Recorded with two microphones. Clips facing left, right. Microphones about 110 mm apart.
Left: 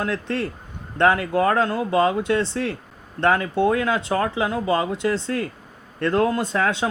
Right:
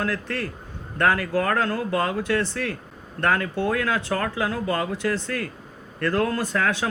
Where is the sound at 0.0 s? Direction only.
20° left (ahead or behind).